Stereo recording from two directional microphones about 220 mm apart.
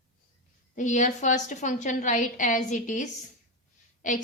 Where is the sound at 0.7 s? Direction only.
35° left (ahead or behind).